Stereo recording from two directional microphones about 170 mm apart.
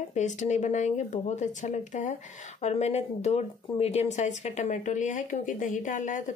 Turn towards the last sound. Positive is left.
turn(degrees=45)  # may be behind; listen again after turning